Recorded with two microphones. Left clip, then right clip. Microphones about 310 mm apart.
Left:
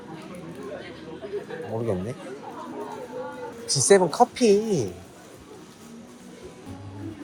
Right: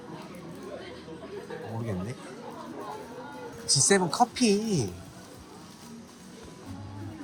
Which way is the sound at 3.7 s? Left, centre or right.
Centre.